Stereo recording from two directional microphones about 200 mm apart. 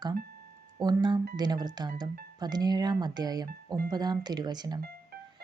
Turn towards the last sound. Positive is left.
turn(degrees=-20)  # may be behind; listen again after turning